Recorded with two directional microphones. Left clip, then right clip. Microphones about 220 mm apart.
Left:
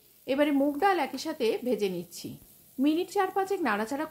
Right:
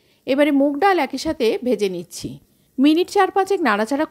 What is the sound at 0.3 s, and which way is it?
A woman's voice, 35° right (ahead or behind).